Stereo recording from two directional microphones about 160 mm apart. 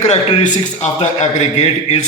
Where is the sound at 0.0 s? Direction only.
45° left (ahead or behind).